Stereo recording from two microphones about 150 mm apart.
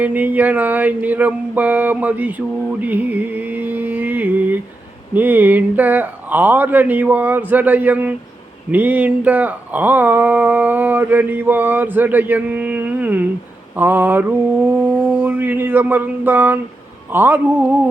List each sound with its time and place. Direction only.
0.0 s speech: 10° right (ahead or behind)